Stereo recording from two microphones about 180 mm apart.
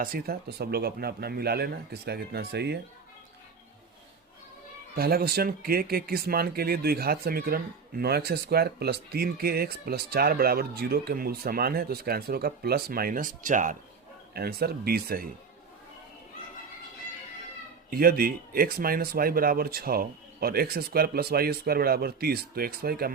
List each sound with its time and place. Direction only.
0.0 s speech: 55° right (ahead or behind)
4.9 s speech: 60° right (ahead or behind)
14.3 s speech: 60° right (ahead or behind)
17.9 s speech: 55° right (ahead or behind)